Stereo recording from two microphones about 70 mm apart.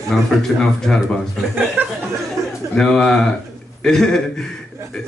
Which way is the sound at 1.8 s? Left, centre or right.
Right.